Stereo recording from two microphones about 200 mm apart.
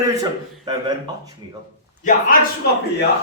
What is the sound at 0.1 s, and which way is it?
Speech, 20° right (ahead or behind).